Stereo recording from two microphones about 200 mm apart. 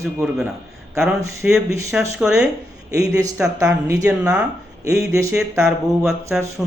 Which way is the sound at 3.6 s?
15° right (ahead or behind).